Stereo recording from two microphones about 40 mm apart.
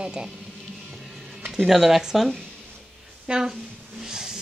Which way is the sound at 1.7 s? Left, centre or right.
Centre.